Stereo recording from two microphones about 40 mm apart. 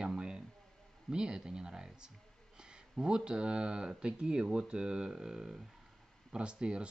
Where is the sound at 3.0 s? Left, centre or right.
Right.